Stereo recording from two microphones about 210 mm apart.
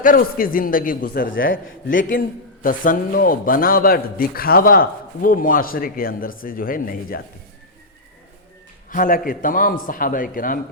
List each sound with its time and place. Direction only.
0.0 s a man's voice: 40° left (ahead or behind)
8.9 s a man's voice: 40° left (ahead or behind)